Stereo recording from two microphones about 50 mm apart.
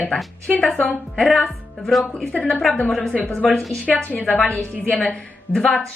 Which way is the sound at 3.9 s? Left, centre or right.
Left.